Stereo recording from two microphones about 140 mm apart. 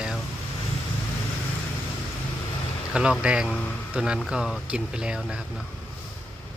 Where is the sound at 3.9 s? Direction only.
5° right (ahead or behind).